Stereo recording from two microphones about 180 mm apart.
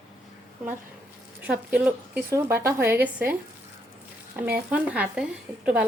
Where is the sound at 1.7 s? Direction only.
10° right (ahead or behind).